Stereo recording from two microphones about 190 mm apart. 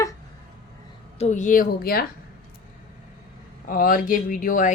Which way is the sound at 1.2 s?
40° left (ahead or behind).